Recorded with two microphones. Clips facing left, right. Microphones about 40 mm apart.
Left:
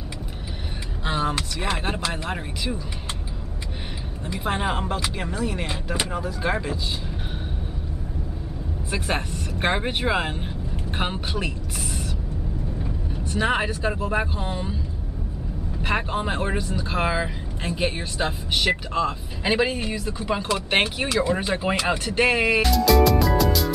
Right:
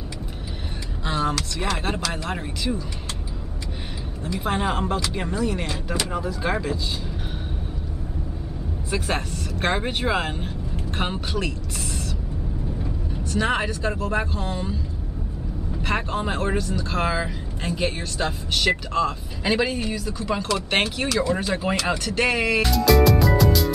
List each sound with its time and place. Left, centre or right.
1.0 s vehicle: centre
1.7 s speech: centre
4.4 s speech: centre
8.9 s speech: centre
12.8 s speech: centre
15.8 s speech: centre
21.1 s speech: centre
22.6 s music: centre